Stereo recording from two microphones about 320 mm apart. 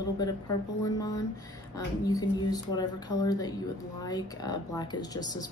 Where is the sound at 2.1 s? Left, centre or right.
Centre.